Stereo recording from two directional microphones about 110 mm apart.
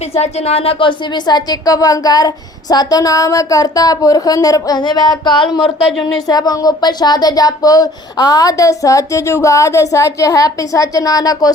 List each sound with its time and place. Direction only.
0.2 s speech: 75° left (ahead or behind); by 11.5 s 35° left (ahead or behind)